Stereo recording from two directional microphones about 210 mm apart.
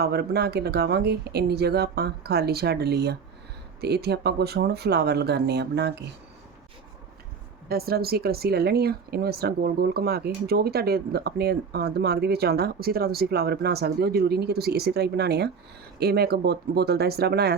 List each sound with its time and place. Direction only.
0.0 s speech: 50° right (ahead or behind)
7.7 s speech: 45° right (ahead or behind)